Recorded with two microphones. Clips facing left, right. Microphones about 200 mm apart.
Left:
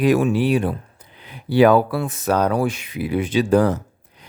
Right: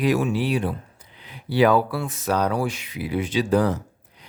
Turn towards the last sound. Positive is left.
turn(degrees=50)  # may be behind; listen again after turning